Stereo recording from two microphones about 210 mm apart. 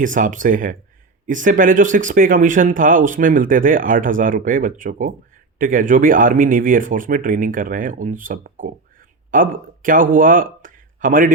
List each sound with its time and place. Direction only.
0.0 s speech: 40° right (ahead or behind)